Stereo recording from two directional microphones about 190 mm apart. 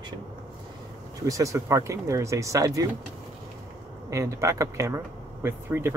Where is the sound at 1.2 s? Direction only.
15° right (ahead or behind).